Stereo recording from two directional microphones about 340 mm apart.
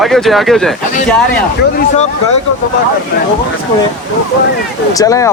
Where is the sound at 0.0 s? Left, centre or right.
Centre.